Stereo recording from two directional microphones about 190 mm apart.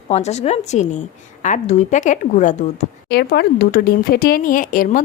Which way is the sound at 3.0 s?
55° left (ahead or behind).